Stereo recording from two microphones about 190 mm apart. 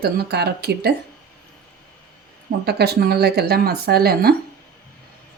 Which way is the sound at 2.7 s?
60° right (ahead or behind).